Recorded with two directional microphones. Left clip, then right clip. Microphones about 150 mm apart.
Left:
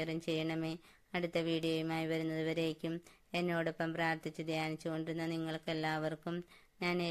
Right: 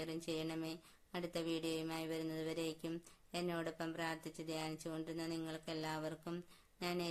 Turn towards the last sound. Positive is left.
turn(degrees=30)  # may be behind; listen again after turning